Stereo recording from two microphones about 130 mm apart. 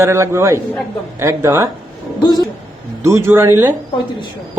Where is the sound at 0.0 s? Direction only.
20° right (ahead or behind).